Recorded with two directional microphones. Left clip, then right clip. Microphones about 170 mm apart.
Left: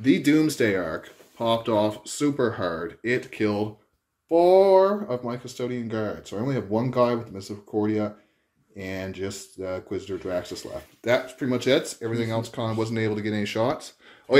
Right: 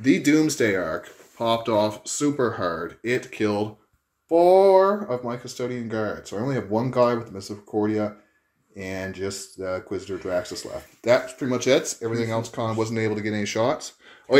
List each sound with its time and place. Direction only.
0.0 s speech: 5° right (ahead or behind)
11.0 s speech: 15° right (ahead or behind)
11.3 s speech: 5° right (ahead or behind)